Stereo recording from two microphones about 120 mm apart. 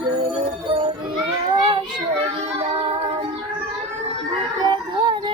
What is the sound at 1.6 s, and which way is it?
Child singing, 45° right (ahead or behind).